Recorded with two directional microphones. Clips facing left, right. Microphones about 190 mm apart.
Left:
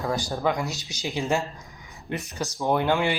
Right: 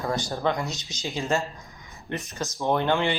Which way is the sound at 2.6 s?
10° left (ahead or behind).